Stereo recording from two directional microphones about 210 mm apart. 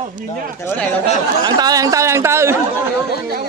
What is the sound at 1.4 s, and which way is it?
Speech, 20° right (ahead or behind).